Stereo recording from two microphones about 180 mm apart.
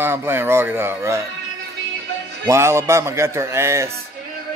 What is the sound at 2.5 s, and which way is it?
Speech, 15° right (ahead or behind).